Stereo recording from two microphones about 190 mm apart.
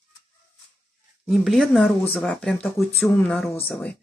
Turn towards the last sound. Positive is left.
turn(degrees=5)  # may be behind; listen again after turning